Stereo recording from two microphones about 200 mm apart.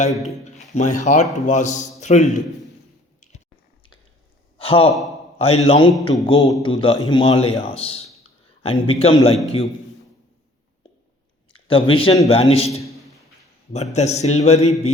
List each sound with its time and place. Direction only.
0.2 s speech: 35° left (ahead or behind)
4.5 s gasp: 30° left (ahead or behind)
5.4 s a man's voice: 30° left (ahead or behind)
11.5 s speech: 25° left (ahead or behind)
13.9 s speech: 35° left (ahead or behind)